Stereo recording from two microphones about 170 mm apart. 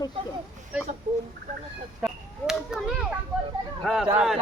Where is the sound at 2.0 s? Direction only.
5° right (ahead or behind).